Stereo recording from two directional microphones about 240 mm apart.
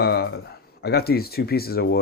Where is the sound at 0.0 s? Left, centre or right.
Left.